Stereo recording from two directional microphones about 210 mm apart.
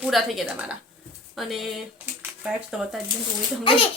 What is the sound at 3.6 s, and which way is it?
Speech, 25° left (ahead or behind).